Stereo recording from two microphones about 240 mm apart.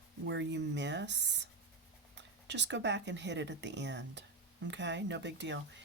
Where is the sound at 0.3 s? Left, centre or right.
Right.